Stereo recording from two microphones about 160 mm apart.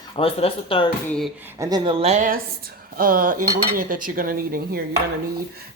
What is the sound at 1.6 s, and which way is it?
Speech, 25° right (ahead or behind).